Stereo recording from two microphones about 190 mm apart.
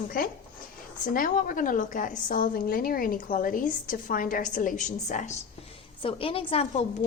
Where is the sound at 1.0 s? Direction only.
45° left (ahead or behind).